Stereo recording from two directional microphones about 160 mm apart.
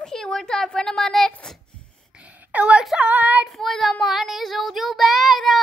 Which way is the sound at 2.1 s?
10° right (ahead or behind).